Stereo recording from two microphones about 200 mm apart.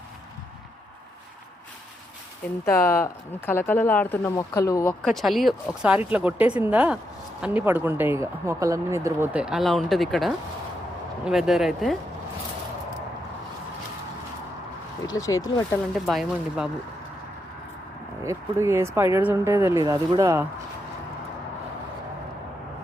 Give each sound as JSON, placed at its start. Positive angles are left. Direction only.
{"t": 2.6, "sound": "speech", "side_deg": 10}
{"t": 15.0, "sound": "speech", "side_deg": 15}
{"t": 16.0, "sound": "speech", "side_deg": 0}
{"t": 18.2, "sound": "speech", "side_deg": -15}